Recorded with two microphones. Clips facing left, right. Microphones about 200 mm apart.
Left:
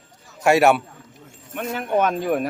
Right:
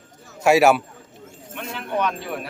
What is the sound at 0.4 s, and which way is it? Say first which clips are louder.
Speech: even; centre (ahead or behind).